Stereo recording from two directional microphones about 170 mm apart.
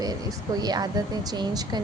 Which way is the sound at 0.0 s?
20° right (ahead or behind).